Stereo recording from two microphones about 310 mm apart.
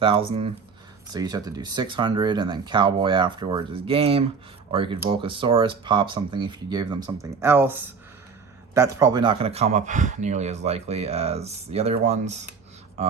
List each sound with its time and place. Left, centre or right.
0.0 s speech: centre